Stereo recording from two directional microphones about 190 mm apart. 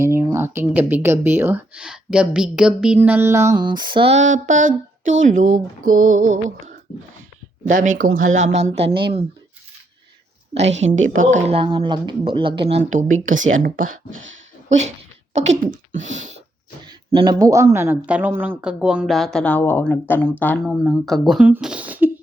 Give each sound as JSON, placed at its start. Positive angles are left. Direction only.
{"t": 0.0, "sound": "speech", "side_deg": -15}
{"t": 4.3, "sound": "a woman's voice", "side_deg": -90}
{"t": 5.2, "sound": "a sound", "side_deg": -40}
{"t": 10.7, "sound": "a woman's voice", "side_deg": -80}
{"t": 11.3, "sound": "speech", "side_deg": -35}
{"t": 13.1, "sound": "a woman's voice", "side_deg": -90}
{"t": 13.5, "sound": "a sound", "side_deg": -45}
{"t": 14.7, "sound": "speech", "side_deg": -35}
{"t": 16.0, "sound": "a sound", "side_deg": -40}
{"t": 16.8, "sound": "speech", "side_deg": -25}
{"t": 20.8, "sound": "speech", "side_deg": 0}